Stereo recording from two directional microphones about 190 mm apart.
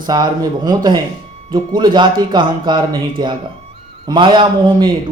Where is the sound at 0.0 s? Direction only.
20° right (ahead or behind).